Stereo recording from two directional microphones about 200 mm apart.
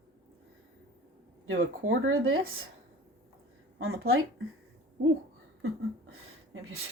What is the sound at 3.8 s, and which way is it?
Speech, 90° right.